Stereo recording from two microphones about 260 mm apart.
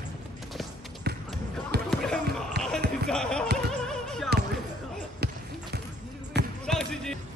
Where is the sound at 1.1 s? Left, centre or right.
Right.